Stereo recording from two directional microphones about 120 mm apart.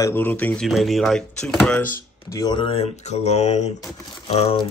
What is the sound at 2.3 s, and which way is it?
Speech, 30° left (ahead or behind).